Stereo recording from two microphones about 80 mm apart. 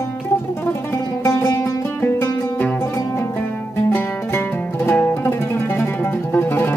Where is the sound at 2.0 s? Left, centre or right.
Left.